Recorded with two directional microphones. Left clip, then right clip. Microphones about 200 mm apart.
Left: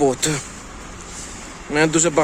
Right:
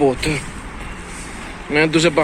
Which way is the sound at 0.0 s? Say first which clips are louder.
Right 2 dB; 25° left (ahead or behind).